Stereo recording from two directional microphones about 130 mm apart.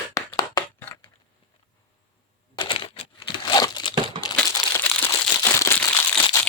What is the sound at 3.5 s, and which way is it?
Crumpling, 35° left (ahead or behind).